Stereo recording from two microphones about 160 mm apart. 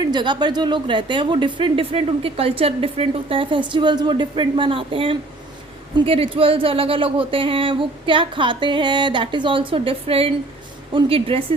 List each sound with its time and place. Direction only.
0.0 s a woman's voice: 25° right (ahead or behind)